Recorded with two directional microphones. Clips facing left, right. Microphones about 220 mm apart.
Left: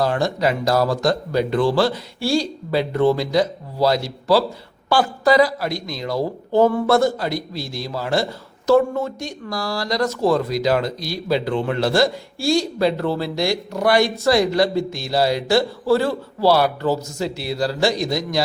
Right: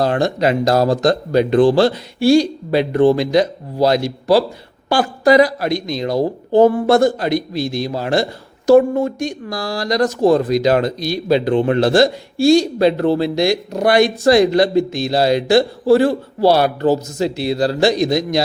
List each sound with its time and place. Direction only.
0.2 s a man's voice: 20° right (ahead or behind)